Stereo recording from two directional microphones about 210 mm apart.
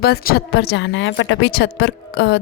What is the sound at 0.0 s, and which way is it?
Speech, 50° left (ahead or behind).